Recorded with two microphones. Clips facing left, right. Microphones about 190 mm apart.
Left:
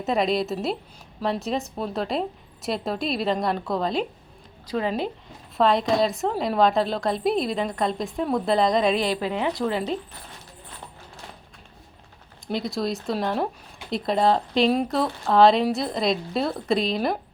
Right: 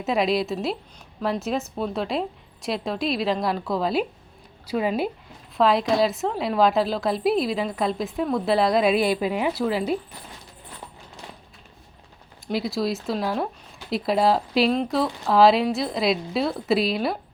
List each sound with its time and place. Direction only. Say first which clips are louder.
0.0 s a woman's voice: even; centre (ahead or behind)
12.5 s a woman's voice: right 2 dB; 5° right (ahead or behind)